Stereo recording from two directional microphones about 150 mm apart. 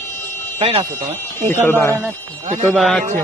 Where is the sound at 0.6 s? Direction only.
35° right (ahead or behind).